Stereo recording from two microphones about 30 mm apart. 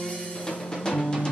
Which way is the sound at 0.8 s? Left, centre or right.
Centre.